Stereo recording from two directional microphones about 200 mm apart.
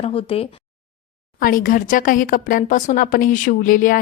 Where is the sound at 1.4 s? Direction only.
45° left (ahead or behind).